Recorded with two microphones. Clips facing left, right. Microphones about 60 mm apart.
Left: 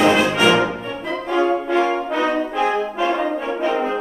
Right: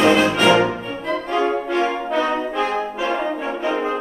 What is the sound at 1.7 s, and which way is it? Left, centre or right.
French horn, centre.